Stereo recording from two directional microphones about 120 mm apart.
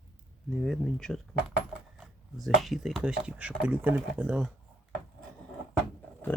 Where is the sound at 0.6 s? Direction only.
5° left (ahead or behind).